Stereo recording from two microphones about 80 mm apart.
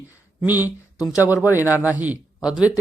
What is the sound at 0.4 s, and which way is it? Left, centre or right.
Speech, right.